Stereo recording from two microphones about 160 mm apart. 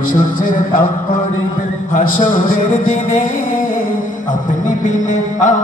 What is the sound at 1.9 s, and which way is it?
Speech, 55° left (ahead or behind).